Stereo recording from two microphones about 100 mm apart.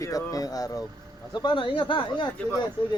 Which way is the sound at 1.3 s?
50° left (ahead or behind).